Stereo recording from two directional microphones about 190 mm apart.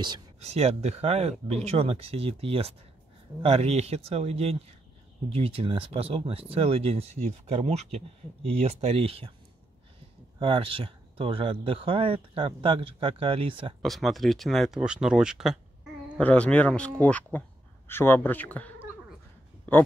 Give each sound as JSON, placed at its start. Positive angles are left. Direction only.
{"t": 0.4, "sound": "speech", "side_deg": -35}
{"t": 10.4, "sound": "speech", "side_deg": -25}
{"t": 13.8, "sound": "speech", "side_deg": 0}